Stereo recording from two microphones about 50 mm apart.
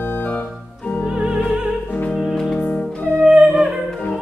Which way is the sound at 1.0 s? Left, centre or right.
Centre.